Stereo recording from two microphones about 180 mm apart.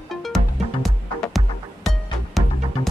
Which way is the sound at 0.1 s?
Centre (ahead or behind).